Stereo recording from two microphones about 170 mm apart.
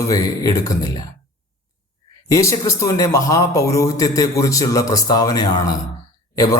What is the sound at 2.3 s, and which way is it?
Speech, 20° left (ahead or behind).